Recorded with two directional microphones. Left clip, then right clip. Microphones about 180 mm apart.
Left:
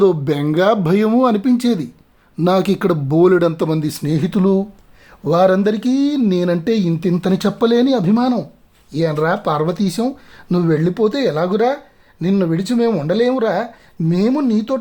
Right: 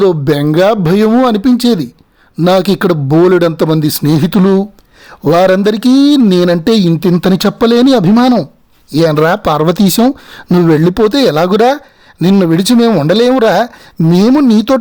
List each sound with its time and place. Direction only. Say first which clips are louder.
0.0 s speech: right 5 dB; 30° right (ahead or behind)